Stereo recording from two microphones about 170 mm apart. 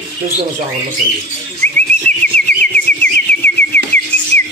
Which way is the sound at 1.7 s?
10° left (ahead or behind).